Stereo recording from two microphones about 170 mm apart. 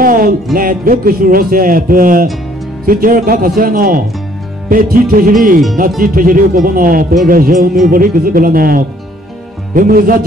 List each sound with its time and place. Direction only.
0.0 s music: 55° right (ahead or behind)
0.6 s speech: 55° right (ahead or behind)